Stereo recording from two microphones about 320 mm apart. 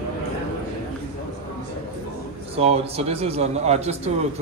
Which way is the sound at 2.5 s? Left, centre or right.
Centre.